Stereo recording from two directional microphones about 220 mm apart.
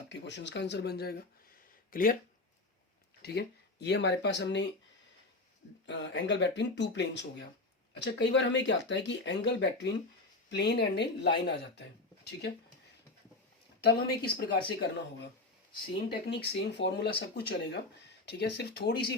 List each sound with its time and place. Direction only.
0.1 s speech: 50° left (ahead or behind)
3.2 s speech: 45° left (ahead or behind)
5.8 s speech: 50° left (ahead or behind)
13.8 s speech: 45° left (ahead or behind)
16.2 s speech: 50° left (ahead or behind)